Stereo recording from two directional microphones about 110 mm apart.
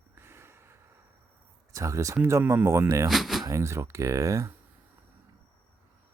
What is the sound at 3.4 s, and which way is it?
Speech, 25° right (ahead or behind).